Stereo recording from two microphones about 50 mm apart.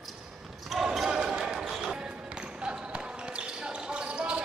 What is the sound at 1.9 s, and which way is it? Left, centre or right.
Basketball bounce, right.